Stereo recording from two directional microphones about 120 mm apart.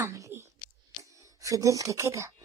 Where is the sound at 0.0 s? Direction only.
25° right (ahead or behind).